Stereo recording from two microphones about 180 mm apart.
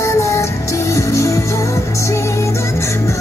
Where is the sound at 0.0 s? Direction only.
15° left (ahead or behind).